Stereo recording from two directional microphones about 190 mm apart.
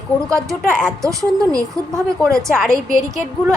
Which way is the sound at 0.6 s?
5° left (ahead or behind).